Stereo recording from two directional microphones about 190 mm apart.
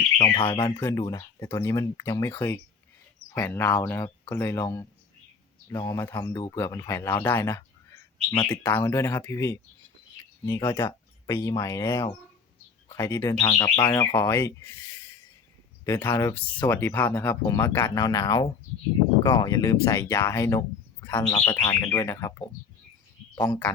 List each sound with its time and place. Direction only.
0.3 s speech: 25° left (ahead or behind)
0.8 s speech: 15° left (ahead or behind)
10.7 s speech: 15° left (ahead or behind)